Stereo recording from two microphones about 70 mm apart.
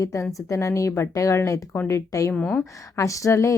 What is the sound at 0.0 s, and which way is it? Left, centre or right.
A woman's voice, left.